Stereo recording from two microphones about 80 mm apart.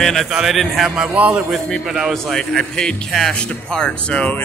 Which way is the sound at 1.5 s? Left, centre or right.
Centre.